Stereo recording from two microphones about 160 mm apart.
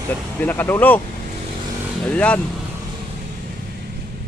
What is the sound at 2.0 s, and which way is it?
Speech, 10° left (ahead or behind).